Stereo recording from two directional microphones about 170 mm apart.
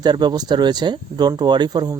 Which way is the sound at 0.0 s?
25° right (ahead or behind).